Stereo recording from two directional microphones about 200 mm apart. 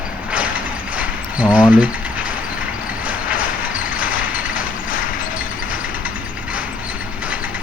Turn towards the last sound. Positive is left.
turn(degrees=-5)  # may be behind; listen again after turning